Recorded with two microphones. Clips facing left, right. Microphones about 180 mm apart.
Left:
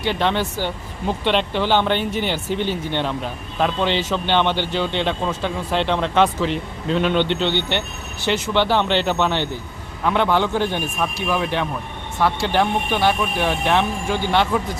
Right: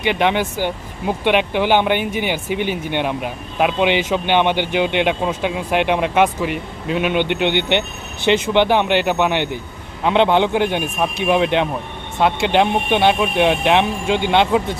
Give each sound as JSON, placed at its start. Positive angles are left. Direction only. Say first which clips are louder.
{"t": 0.0, "sound": "speech", "louder": "right 3 dB", "side_deg": -15}